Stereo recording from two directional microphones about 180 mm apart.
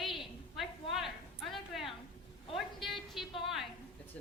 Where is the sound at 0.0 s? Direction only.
Centre (ahead or behind).